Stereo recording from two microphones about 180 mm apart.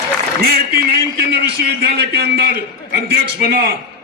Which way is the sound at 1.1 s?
65° right (ahead or behind).